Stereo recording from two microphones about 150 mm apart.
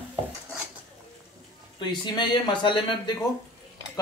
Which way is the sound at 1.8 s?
30° left (ahead or behind).